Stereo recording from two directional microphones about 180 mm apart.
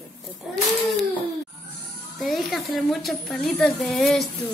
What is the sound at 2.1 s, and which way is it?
A woman's voice, centre (ahead or behind).